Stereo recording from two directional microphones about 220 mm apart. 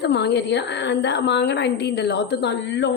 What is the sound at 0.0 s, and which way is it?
A woman's voice, 50° left (ahead or behind).